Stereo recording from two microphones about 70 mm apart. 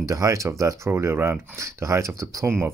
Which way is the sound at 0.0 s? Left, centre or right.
Right.